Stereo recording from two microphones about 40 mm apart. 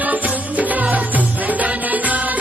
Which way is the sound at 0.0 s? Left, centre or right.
Right.